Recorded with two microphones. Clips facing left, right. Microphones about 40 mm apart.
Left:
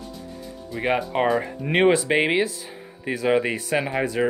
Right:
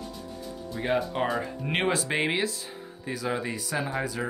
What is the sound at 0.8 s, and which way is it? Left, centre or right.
Speech, left.